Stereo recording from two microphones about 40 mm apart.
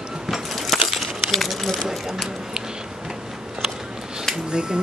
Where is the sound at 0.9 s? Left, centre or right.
Centre.